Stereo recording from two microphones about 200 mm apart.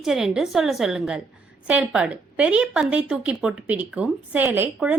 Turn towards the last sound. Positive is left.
turn(degrees=-10)  # may be behind; listen again after turning